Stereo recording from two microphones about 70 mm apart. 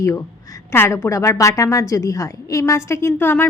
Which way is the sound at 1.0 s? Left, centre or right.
Left.